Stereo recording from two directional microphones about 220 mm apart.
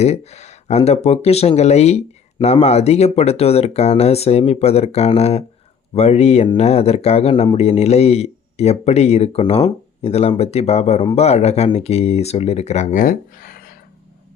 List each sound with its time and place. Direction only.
0.0 s speech: 30° left (ahead or behind)